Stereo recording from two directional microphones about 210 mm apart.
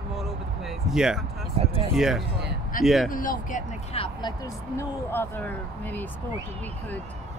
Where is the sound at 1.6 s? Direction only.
30° right (ahead or behind).